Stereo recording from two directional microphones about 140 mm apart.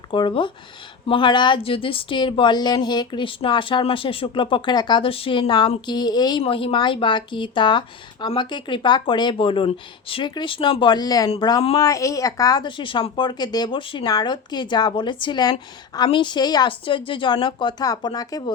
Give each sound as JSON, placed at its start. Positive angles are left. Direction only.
{"t": 0.1, "sound": "speech", "side_deg": 35}